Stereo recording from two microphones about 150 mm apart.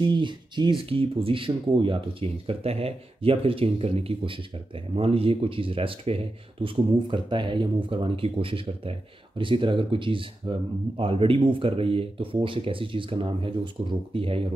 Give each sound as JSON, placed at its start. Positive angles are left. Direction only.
{"t": 0.0, "sound": "speech", "side_deg": -30}